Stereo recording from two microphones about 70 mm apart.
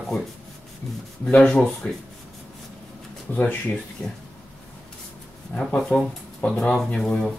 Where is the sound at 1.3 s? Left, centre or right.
Centre.